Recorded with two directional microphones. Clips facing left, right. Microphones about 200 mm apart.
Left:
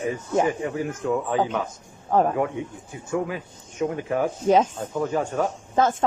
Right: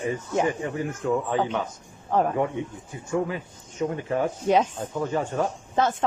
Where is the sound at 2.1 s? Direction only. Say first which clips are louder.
Left 3 dB; 45° left (ahead or behind).